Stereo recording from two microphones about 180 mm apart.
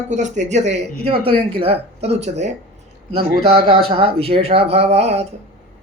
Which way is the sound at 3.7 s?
30° right (ahead or behind).